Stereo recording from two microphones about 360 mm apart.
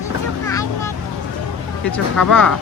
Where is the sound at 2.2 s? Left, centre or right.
Centre.